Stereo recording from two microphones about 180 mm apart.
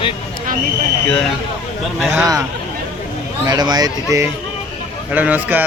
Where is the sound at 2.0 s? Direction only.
5° right (ahead or behind).